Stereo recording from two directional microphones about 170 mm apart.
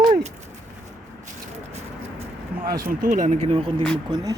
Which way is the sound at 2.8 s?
55° right (ahead or behind).